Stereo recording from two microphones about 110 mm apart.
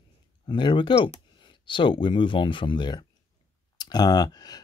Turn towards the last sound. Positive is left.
turn(degrees=35)  # may be behind; listen again after turning